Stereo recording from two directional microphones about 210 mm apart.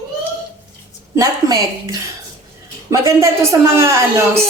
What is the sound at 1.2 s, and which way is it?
A woman's voice, 15° right (ahead or behind).